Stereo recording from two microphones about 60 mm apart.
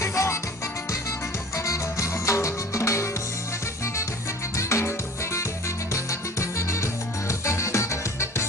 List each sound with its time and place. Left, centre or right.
0.0 s music: left
1.6 s music: left
4.6 s music: left